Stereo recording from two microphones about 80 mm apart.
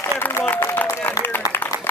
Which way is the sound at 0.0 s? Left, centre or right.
Left.